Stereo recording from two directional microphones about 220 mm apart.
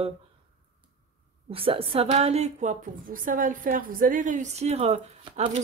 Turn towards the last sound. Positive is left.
turn(degrees=-30)  # may be behind; listen again after turning